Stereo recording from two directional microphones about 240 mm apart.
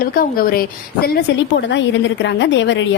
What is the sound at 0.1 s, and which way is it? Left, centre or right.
Speech, left.